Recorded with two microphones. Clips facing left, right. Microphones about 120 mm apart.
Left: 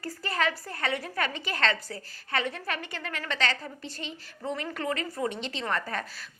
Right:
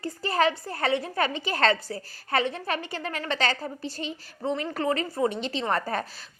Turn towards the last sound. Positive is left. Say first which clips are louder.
# right 4 dB
turn(degrees=-35)  # may be behind; listen again after turning